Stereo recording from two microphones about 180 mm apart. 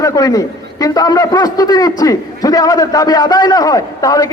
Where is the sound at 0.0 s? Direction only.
20° left (ahead or behind).